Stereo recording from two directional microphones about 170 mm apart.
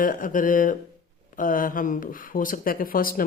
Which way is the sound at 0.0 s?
50° left (ahead or behind).